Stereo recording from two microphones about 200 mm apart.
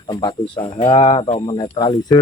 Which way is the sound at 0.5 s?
25° left (ahead or behind).